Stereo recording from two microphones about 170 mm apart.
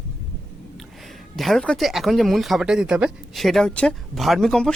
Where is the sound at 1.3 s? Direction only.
Centre (ahead or behind).